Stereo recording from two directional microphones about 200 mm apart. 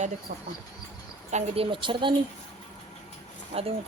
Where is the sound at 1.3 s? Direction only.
25° right (ahead or behind).